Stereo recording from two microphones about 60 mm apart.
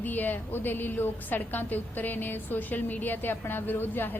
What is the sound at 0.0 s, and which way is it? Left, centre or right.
A woman's voice, left.